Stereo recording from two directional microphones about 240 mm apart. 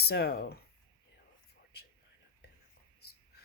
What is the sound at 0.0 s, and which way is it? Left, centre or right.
Speech, left.